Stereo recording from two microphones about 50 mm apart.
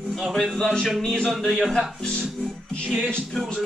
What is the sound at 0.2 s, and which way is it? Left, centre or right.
Speech, centre.